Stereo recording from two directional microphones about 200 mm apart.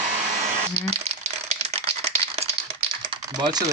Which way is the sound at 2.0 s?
30° right (ahead or behind).